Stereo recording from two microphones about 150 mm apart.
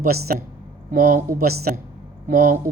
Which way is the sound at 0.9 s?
65° right (ahead or behind).